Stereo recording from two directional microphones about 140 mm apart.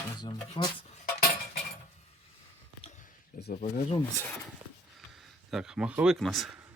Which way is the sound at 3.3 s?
70° left (ahead or behind).